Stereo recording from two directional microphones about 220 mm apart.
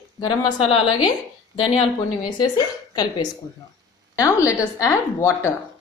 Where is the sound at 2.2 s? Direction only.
20° left (ahead or behind).